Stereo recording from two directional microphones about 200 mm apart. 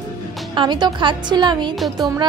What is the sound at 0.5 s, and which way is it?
Speech, 20° right (ahead or behind).